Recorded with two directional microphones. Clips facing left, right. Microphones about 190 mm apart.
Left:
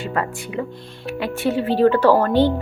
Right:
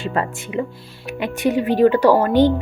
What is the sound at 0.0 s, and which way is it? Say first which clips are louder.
Speech: right 1 dB; 25° right (ahead or behind).